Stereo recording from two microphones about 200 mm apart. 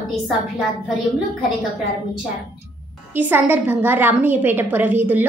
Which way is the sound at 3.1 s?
10° right (ahead or behind).